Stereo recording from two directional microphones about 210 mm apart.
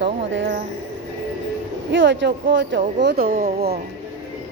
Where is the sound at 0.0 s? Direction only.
55° right (ahead or behind).